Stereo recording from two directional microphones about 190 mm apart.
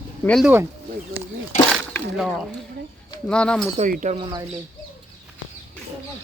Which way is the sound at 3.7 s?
40° right (ahead or behind).